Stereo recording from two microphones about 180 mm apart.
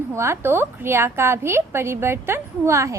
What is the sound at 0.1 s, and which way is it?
A woman's voice, 15° right (ahead or behind).